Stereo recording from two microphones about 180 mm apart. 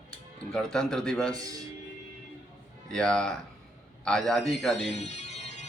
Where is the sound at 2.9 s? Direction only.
5° left (ahead or behind).